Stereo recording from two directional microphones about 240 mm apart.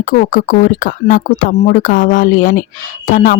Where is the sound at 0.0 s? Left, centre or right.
Left.